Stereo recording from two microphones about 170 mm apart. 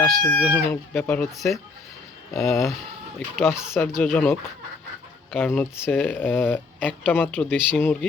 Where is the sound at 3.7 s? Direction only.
15° left (ahead or behind).